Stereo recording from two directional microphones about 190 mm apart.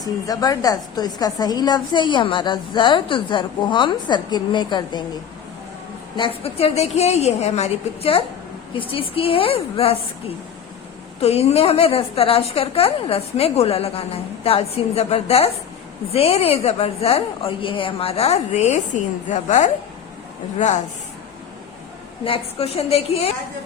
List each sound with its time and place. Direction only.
0.0 s a woman's voice: 20° left (ahead or behind)
6.1 s a woman's voice: 30° left (ahead or behind)
22.2 s a woman's voice: 30° left (ahead or behind)